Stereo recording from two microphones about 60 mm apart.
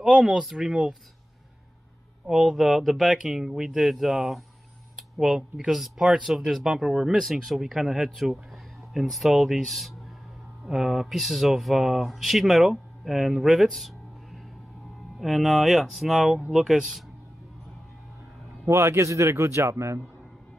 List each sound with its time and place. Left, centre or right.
0.0 s speech: centre
2.2 s speech: centre
18.7 s speech: right